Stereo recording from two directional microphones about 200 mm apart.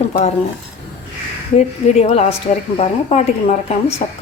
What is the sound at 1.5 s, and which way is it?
A woman's voice, 30° left (ahead or behind).